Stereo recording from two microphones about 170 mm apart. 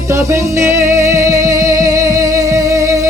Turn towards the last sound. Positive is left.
turn(degrees=-20)  # may be behind; listen again after turning